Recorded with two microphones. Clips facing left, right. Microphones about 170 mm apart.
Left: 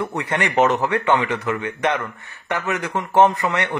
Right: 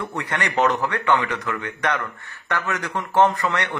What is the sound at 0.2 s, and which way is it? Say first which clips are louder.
Speech: left 3 dB; 20° left (ahead or behind).